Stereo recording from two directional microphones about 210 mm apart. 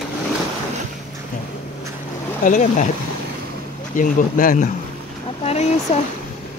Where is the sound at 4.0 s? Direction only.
40° left (ahead or behind).